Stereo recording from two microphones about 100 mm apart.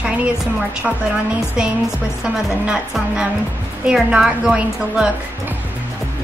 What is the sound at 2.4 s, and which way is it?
A woman's voice, 5° right (ahead or behind).